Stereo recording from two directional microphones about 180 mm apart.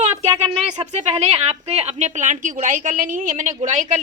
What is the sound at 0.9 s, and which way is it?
A woman's voice, 35° right (ahead or behind).